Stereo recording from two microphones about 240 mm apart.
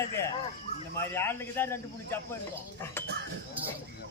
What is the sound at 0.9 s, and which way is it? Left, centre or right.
Speech, centre.